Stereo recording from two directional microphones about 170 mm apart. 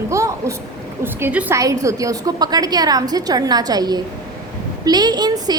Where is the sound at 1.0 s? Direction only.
10° right (ahead or behind).